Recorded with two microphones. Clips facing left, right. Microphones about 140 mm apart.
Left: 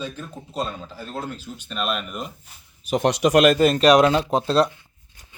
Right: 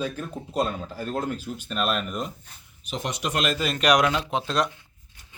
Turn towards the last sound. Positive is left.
turn(degrees=35)  # may be behind; listen again after turning